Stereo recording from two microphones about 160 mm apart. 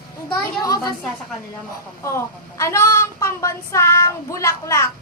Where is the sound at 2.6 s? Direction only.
15° left (ahead or behind).